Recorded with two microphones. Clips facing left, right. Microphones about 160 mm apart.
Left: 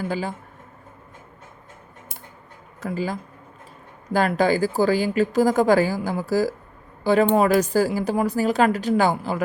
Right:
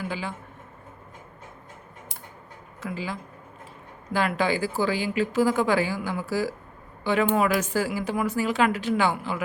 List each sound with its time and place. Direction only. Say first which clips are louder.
0.0 s speech: left 5 dB; 40° left (ahead or behind)
2.8 s speech: left 6 dB; 45° left (ahead or behind)